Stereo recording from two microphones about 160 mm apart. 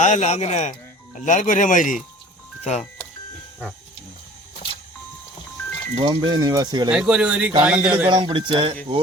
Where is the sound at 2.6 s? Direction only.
45° left (ahead or behind).